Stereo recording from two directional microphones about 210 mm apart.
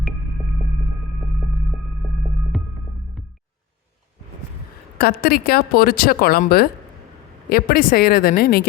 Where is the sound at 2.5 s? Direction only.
Centre (ahead or behind).